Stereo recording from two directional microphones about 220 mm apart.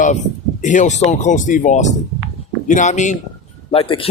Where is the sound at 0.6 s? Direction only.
35° left (ahead or behind).